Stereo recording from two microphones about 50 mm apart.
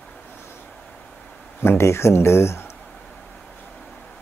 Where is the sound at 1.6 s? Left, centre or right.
Left.